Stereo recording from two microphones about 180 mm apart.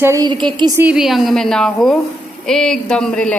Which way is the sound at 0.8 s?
5° right (ahead or behind).